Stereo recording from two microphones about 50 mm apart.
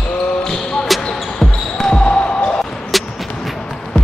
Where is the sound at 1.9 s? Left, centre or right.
Centre.